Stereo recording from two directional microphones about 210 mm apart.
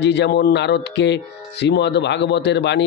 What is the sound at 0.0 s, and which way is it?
Speech, 55° left (ahead or behind).